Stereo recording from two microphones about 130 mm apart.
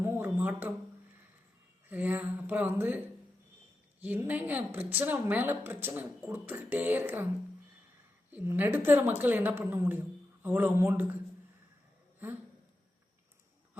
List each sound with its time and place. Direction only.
0.0 s a sound: 15° right (ahead or behind)
1.9 s a woman's voice: 15° right (ahead or behind)
4.0 s a woman's voice: 15° right (ahead or behind)
8.3 s a woman's voice: 15° right (ahead or behind)